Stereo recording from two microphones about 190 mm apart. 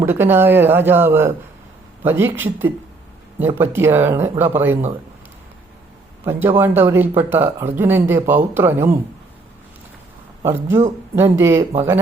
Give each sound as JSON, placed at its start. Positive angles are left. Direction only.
{"t": 0.0, "sound": "speech", "side_deg": -10}
{"t": 6.2, "sound": "speech", "side_deg": -10}
{"t": 10.4, "sound": "speech", "side_deg": -15}